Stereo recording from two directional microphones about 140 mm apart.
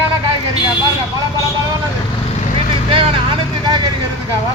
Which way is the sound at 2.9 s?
35° right (ahead or behind).